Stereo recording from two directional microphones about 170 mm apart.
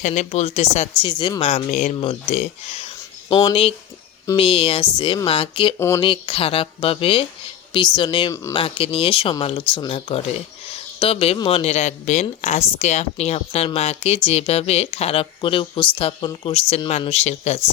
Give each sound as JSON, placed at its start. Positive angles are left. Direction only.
{"t": 0.0, "sound": "a woman's voice", "side_deg": 45}
{"t": 10.7, "sound": "a sound", "side_deg": 35}
{"t": 11.3, "sound": "a woman's voice", "side_deg": 30}